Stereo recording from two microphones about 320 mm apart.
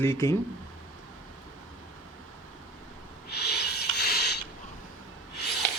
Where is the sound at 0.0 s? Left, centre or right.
Centre.